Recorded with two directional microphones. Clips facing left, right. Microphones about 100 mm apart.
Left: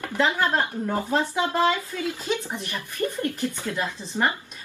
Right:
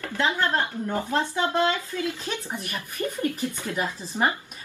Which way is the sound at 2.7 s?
15° right (ahead or behind).